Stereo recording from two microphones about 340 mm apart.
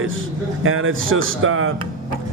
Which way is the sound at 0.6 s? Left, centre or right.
Right.